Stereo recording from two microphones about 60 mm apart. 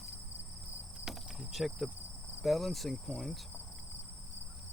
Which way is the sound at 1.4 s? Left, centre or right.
Centre.